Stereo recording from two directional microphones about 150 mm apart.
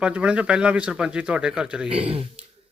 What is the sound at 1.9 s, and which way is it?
Speech, 35° right (ahead or behind).